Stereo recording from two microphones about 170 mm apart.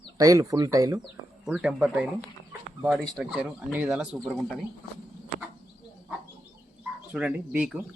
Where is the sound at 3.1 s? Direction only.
Centre (ahead or behind).